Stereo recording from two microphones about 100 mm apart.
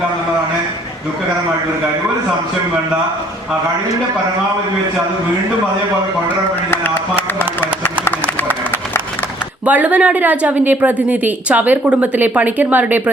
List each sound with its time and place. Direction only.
9.6 s speech: 15° right (ahead or behind)